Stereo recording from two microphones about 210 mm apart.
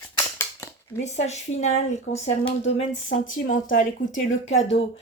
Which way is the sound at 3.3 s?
40° left (ahead or behind).